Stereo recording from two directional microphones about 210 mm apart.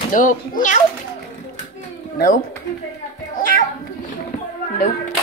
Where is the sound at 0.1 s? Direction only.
40° left (ahead or behind).